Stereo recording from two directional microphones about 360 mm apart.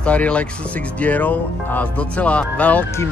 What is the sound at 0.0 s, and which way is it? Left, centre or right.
Speech, centre.